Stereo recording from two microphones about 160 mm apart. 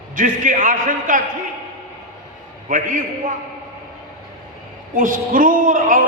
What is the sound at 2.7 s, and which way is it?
Speech, 55° right (ahead or behind).